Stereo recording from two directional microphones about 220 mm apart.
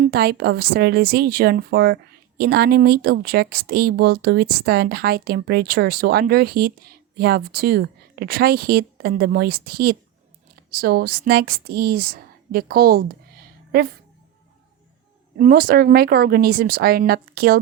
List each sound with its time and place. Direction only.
0.0 s a woman's voice: 45° right (ahead or behind)
15.4 s speech: 40° right (ahead or behind)